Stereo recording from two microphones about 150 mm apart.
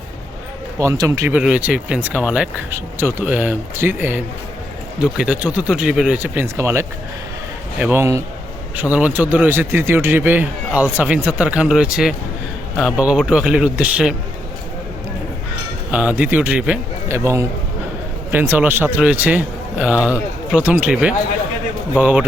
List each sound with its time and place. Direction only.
0.8 s speech: 20° right (ahead or behind)
1.4 s speech: 10° right (ahead or behind)
15.9 s speech: 10° right (ahead or behind)